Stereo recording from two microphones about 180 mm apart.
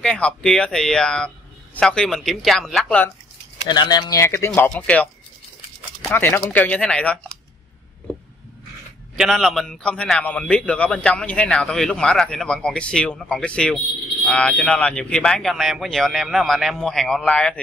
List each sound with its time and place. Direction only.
0.0 s a man's voice: 5° left (ahead or behind)
3.6 s speech: 25° left (ahead or behind); by 7.2 s 5° left (ahead or behind)
9.1 s a man's voice: centre (ahead or behind)